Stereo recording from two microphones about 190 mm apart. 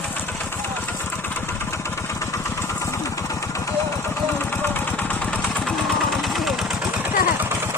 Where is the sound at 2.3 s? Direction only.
15° left (ahead or behind); by 7.1 s centre (ahead or behind).